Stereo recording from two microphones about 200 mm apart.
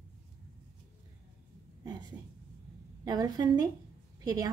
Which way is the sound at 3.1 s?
20° right (ahead or behind).